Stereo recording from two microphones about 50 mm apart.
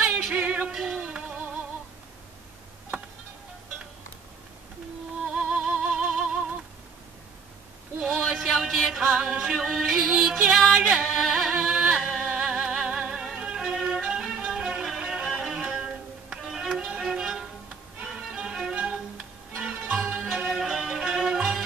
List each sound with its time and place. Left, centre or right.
0.3 s music: right
5.2 s music: centre
8.0 s a sound: centre
8.8 s music: centre
11.5 s music: centre
12.0 s music: centre
12.4 s music: centre
15.7 s music: right
16.4 s music: centre
20.0 s music: centre